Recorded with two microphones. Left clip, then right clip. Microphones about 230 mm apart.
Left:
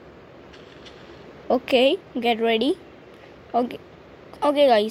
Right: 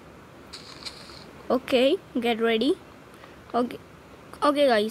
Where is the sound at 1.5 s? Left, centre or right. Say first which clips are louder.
Left 3 dB; right.